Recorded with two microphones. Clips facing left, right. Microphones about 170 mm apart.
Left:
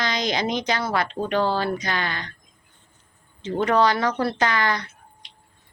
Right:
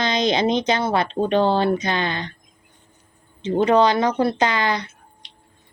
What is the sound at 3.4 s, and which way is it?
Speech, 20° right (ahead or behind).